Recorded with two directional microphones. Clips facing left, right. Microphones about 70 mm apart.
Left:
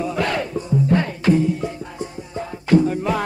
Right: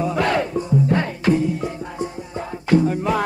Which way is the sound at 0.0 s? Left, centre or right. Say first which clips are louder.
Right 2 dB; right.